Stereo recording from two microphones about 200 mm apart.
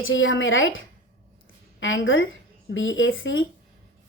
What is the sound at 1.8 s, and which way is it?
A woman's voice, 75° left (ahead or behind).